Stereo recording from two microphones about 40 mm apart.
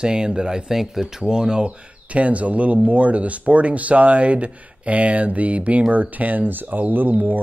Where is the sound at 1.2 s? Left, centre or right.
Centre.